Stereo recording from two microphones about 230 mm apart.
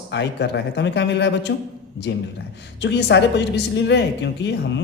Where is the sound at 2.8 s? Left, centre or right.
Left.